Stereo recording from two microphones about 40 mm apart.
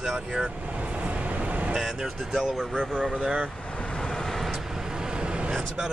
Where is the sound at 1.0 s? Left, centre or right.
Right.